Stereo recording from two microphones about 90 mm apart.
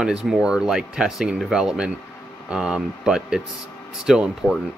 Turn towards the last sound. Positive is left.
turn(degrees=-5)  # may be behind; listen again after turning